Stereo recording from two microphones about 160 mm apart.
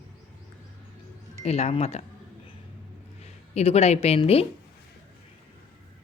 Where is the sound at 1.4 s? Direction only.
45° left (ahead or behind).